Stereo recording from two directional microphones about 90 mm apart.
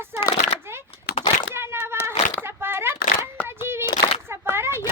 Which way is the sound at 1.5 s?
25° right (ahead or behind).